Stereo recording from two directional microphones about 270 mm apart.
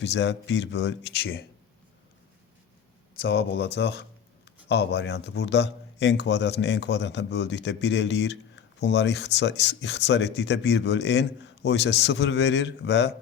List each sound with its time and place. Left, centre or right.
0.0 s speech: left
3.2 s speech: left